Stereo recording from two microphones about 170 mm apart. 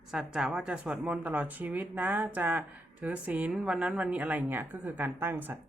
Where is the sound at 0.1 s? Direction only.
5° right (ahead or behind).